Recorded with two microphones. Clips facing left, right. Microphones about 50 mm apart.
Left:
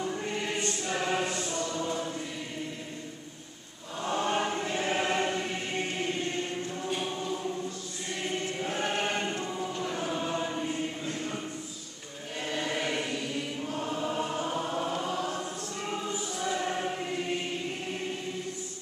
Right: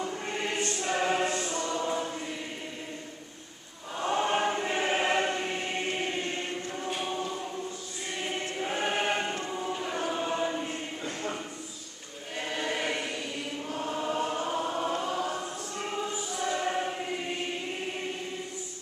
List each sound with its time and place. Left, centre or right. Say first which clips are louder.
0.3 s choir: right 1 dB; right
4.0 s choir: right 2 dB; right
12.4 s choir: even; centre